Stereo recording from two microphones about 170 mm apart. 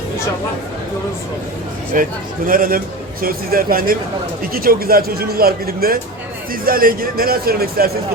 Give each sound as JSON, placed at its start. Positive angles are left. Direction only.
{"t": 1.9, "sound": "a man's voice", "side_deg": -55}